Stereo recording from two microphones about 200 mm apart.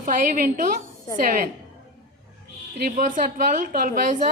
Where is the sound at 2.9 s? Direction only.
40° right (ahead or behind).